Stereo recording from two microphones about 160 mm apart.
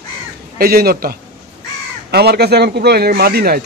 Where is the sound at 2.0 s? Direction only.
90° right.